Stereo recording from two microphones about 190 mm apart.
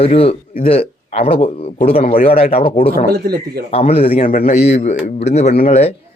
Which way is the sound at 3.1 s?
55° right (ahead or behind).